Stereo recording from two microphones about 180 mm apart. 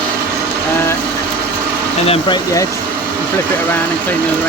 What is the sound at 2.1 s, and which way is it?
Speech, 25° left (ahead or behind).